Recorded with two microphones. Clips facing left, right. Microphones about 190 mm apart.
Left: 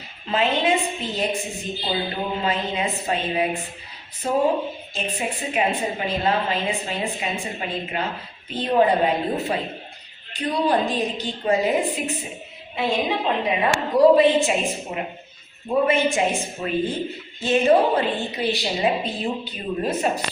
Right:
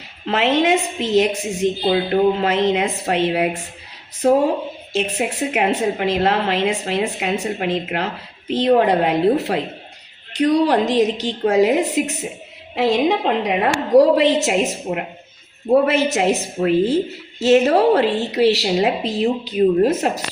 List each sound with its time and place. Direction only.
0.3 s a woman's voice: 80° right
4.9 s a woman's voice: 85° right
14.9 s speech: 60° right (ahead or behind)
15.7 s a woman's voice: 90° right